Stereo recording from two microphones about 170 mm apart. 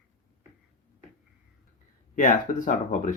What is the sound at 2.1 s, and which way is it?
Speech, 50° left (ahead or behind).